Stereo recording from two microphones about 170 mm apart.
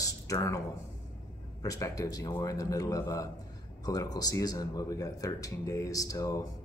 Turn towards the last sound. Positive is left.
turn(degrees=20)  # may be behind; listen again after turning